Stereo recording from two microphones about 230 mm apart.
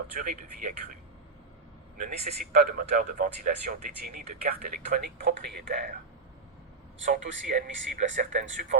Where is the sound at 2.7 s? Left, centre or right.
Right.